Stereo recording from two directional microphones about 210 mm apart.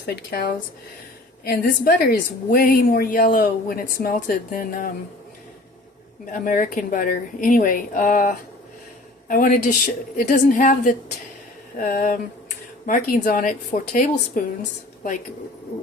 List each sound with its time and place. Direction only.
0.0 s a woman's voice: 50° left (ahead or behind)
6.3 s a woman's voice: 40° left (ahead or behind)